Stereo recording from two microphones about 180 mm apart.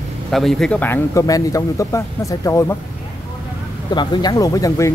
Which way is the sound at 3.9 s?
25° left (ahead or behind).